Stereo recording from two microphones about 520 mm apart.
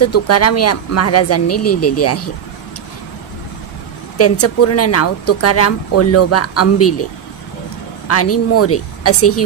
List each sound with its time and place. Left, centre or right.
0.0 s speech: left
4.2 s speech: left
8.1 s speech: left